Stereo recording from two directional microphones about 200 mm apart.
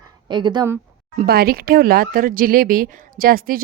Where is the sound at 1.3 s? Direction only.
50° right (ahead or behind).